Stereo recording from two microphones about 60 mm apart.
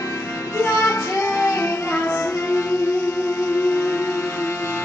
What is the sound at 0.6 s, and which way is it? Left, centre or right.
Music, left.